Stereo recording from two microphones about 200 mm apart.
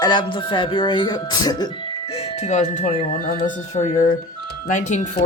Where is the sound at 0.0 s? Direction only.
20° left (ahead or behind).